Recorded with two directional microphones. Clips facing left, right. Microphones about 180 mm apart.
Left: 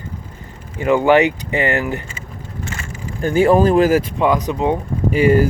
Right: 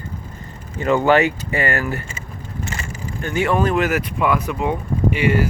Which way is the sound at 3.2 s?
35° left (ahead or behind).